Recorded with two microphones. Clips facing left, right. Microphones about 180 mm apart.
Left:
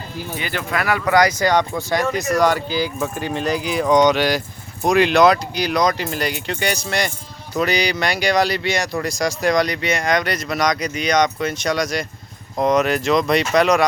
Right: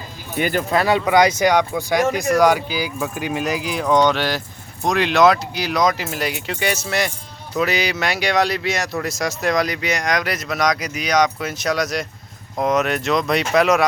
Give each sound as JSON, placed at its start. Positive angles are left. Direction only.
{"t": 0.3, "sound": "speech", "side_deg": -50}
{"t": 0.7, "sound": "speech", "side_deg": -25}
{"t": 1.5, "sound": "speech", "side_deg": -5}